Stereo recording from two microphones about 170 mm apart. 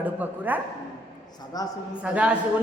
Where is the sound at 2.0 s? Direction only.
5° right (ahead or behind).